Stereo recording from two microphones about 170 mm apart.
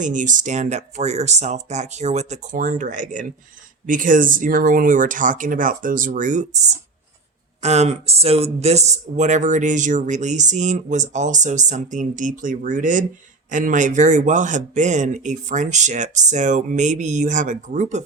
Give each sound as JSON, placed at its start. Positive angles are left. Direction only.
{"t": 0.0, "sound": "speech", "side_deg": -50}